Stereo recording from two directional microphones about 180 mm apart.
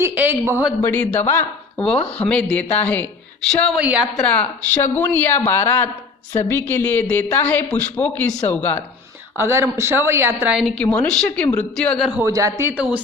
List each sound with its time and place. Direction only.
0.0 s a woman's voice: 10° right (ahead or behind)
0.8 s a man's voice: 10° left (ahead or behind); by 4.0 s 5° right (ahead or behind)
4.0 s a man's voice: 5° left (ahead or behind)
9.4 s a woman's voice: 15° right (ahead or behind)
12.2 s a woman's voice: 20° right (ahead or behind)